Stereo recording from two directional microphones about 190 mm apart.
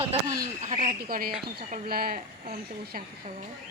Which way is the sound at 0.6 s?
40° right (ahead or behind).